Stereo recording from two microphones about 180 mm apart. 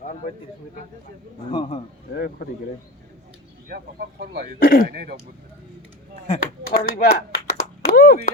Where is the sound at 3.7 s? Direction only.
60° right (ahead or behind).